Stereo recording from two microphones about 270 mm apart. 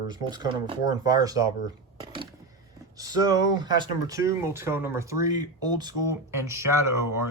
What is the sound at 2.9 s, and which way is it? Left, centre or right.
Speech, centre.